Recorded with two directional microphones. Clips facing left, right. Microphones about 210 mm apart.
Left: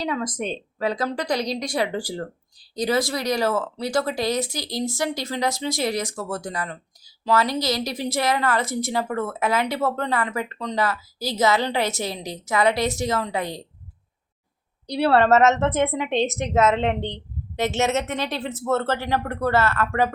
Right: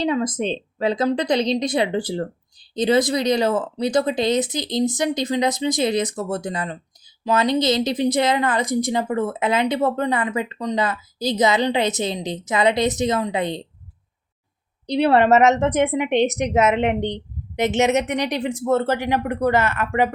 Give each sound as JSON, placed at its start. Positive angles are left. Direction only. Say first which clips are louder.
{"t": 0.0, "sound": "speech", "louder": "right 5 dB", "side_deg": -25}
{"t": 14.8, "sound": "a woman's voice", "louder": "right 2 dB", "side_deg": -20}